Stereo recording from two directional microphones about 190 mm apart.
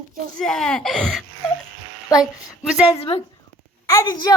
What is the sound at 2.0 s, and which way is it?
Speech, 20° left (ahead or behind).